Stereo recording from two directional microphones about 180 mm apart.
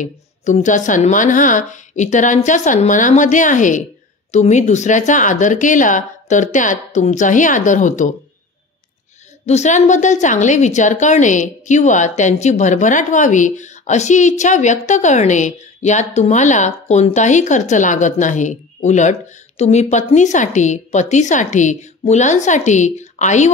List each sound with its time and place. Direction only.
0.0 s a woman's voice: 45° left (ahead or behind)
9.5 s a woman's voice: 40° left (ahead or behind)